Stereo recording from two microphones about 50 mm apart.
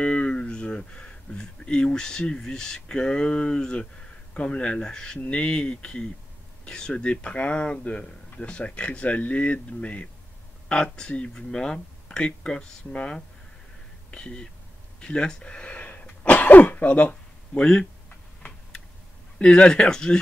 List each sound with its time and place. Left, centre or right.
0.0 s speech: left
15.0 s throat clearing: left
19.3 s speech: left